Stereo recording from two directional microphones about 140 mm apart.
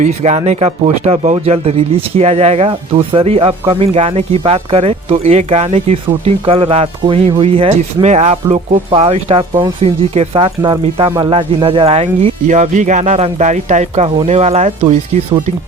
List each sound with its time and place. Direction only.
0.0 s speech: 50° right (ahead or behind)